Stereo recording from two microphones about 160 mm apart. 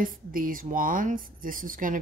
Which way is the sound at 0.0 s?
60° right (ahead or behind).